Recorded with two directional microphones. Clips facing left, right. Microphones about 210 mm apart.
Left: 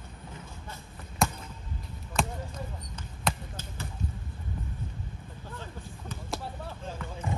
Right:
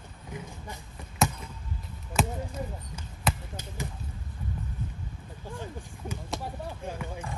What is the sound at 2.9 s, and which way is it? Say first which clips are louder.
Basketball bounce: left 1 dB; 10° right (ahead or behind).